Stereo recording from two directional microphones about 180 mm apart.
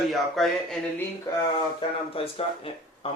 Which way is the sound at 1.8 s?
30° left (ahead or behind).